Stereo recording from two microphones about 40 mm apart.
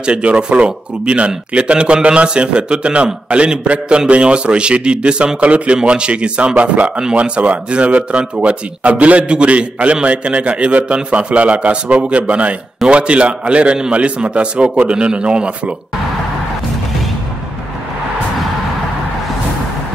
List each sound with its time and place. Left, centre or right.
0.0 s speech: right